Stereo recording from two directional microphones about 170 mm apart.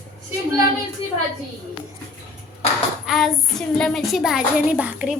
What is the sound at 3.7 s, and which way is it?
A child's voice, centre (ahead or behind).